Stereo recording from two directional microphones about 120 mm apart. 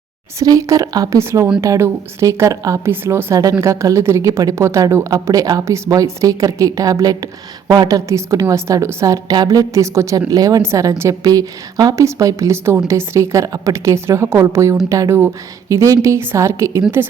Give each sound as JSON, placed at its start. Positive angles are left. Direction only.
{"t": 0.3, "sound": "a woman's voice", "side_deg": -30}